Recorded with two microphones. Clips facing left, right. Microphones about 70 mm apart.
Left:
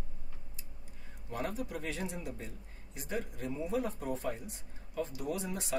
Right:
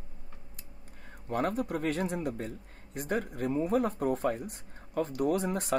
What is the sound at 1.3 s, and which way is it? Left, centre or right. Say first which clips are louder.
Speech: right 7 dB; right.